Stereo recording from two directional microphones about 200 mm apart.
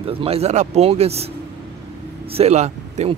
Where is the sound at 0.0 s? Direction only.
30° right (ahead or behind).